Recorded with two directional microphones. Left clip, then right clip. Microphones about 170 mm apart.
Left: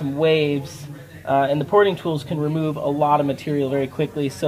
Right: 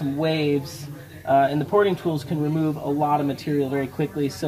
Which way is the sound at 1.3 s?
35° left (ahead or behind).